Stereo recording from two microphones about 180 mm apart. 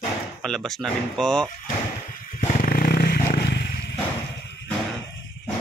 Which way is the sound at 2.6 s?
55° left (ahead or behind).